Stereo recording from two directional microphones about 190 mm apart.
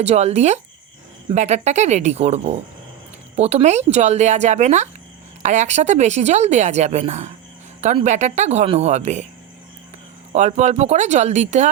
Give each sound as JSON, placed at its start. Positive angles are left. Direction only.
{"t": 0.0, "sound": "a woman's voice", "side_deg": -35}
{"t": 10.3, "sound": "a woman's voice", "side_deg": -35}